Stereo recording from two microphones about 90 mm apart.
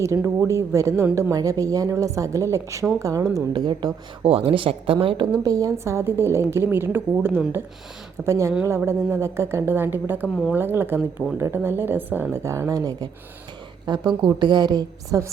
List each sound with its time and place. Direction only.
0.0 s a woman's voice: 35° right (ahead or behind)
3.5 s a woman's voice: 55° right (ahead or behind)
5.4 s a woman's voice: 40° right (ahead or behind)